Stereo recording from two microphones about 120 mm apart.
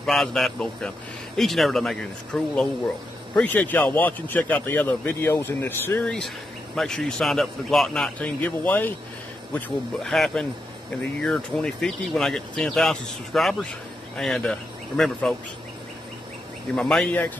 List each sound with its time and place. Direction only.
0.0 s speech: centre (ahead or behind); by 6.0 s 15° left (ahead or behind)
6.0 s speech: 5° left (ahead or behind)
9.9 s speech: 5° left (ahead or behind)
16.7 s speech: 5° left (ahead or behind)